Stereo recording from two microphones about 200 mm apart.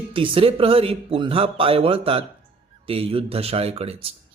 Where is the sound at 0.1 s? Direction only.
25° right (ahead or behind).